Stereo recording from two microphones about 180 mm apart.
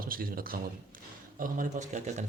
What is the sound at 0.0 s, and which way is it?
A man's voice, 55° right (ahead or behind).